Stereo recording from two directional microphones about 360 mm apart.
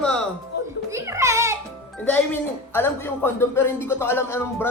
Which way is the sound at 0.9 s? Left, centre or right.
Centre.